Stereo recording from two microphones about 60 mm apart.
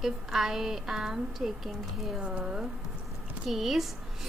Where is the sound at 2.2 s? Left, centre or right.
Centre.